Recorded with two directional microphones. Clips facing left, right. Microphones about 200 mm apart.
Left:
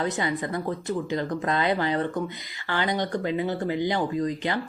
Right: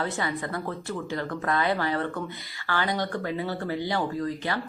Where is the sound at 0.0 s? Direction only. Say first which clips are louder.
Left 3 dB; 20° left (ahead or behind).